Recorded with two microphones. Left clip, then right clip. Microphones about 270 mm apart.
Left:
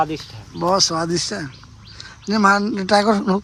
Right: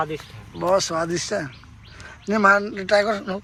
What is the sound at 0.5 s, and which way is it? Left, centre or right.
Speech, centre.